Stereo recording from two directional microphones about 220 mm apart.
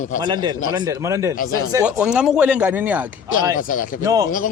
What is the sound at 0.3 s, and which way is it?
Speech, 20° right (ahead or behind).